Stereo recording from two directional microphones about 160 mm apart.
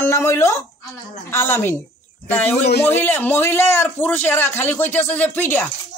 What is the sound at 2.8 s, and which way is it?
Speech, 15° left (ahead or behind).